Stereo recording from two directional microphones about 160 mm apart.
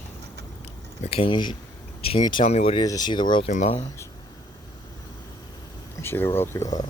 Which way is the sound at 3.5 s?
45° left (ahead or behind).